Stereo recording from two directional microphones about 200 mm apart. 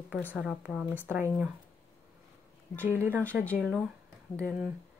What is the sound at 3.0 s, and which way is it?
Speech, 10° right (ahead or behind).